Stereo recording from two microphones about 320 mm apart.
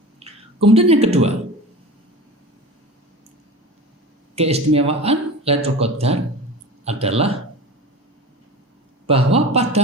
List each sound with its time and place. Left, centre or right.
0.2 s speech: centre
4.4 s speech: centre
9.0 s speech: centre